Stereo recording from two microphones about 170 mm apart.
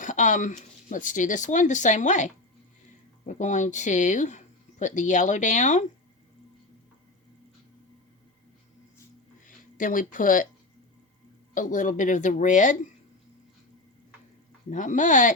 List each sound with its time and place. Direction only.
0.0 s speech: 50° left (ahead or behind)
9.5 s speech: 50° left (ahead or behind)
11.5 s speech: 50° left (ahead or behind)
14.7 s speech: 45° left (ahead or behind)